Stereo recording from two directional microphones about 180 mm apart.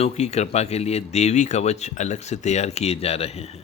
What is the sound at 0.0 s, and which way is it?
Speech, 35° left (ahead or behind).